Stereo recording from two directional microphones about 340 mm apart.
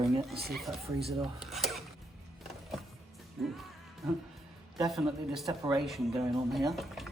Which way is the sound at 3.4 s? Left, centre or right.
Centre.